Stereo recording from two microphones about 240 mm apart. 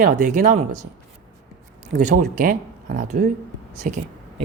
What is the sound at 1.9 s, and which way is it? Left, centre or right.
Speech, right.